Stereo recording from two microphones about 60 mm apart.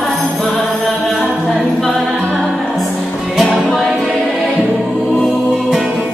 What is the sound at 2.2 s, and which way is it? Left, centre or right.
Music, centre.